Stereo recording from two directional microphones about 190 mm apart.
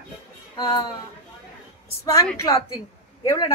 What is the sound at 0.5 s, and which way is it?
Speech, 20° left (ahead or behind).